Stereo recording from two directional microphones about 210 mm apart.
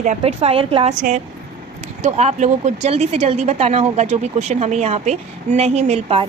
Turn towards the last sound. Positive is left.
turn(degrees=-30)  # may be behind; listen again after turning